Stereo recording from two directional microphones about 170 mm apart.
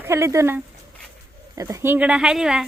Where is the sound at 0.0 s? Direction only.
15° right (ahead or behind).